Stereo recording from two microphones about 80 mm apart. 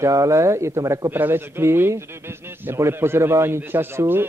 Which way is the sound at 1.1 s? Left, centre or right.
Right.